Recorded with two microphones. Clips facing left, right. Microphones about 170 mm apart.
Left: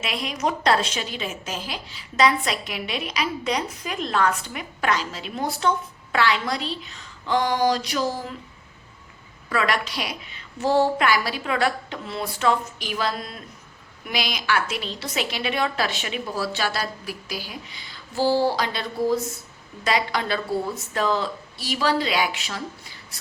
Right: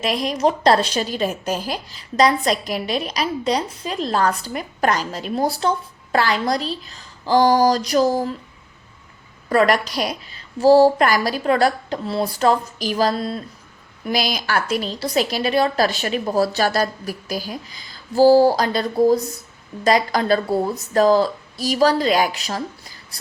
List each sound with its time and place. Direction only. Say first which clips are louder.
0.0 s a woman's voice: right 7 dB; 40° right (ahead or behind)
9.5 s a woman's voice: right 7 dB; 40° right (ahead or behind)